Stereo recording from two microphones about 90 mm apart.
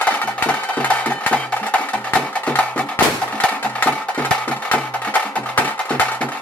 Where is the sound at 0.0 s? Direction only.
15° left (ahead or behind).